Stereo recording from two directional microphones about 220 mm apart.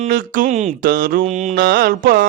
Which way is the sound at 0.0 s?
40° right (ahead or behind).